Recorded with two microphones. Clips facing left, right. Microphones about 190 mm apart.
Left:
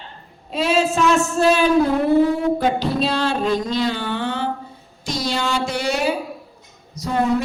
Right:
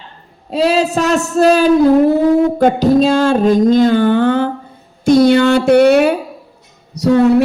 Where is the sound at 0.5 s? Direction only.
35° right (ahead or behind); by 6.1 s 60° right (ahead or behind).